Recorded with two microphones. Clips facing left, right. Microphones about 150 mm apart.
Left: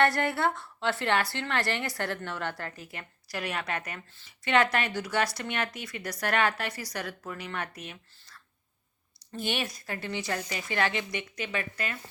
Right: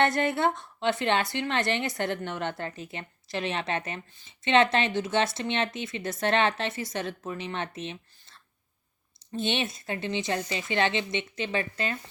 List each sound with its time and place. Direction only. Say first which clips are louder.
0.0 s a woman's voice: right 1 dB; 20° right (ahead or behind)